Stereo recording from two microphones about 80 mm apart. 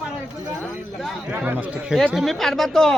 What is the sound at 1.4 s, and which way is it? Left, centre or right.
Speech, centre.